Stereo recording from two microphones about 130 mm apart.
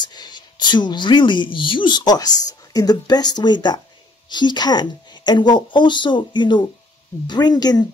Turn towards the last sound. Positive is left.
turn(degrees=30)  # may be behind; listen again after turning